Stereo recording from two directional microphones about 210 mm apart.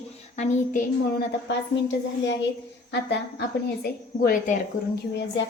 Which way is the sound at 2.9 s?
55° left (ahead or behind).